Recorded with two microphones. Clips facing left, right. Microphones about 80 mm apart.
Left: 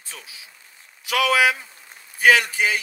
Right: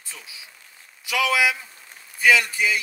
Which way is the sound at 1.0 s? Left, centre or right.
Left.